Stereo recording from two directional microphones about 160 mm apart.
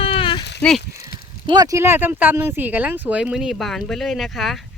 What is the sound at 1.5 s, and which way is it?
Speech, 20° right (ahead or behind).